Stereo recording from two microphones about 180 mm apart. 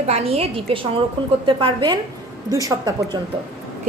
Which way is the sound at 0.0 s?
35° right (ahead or behind).